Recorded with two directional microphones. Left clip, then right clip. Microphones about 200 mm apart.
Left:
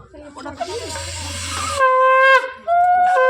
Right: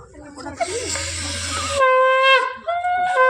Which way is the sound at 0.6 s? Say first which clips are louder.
Right 3 dB; 20° right (ahead or behind).